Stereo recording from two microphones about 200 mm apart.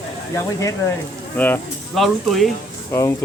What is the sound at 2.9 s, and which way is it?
Speech, 15° left (ahead or behind).